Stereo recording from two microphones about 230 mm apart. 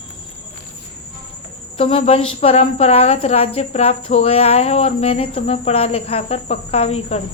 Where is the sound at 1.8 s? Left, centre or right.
Left.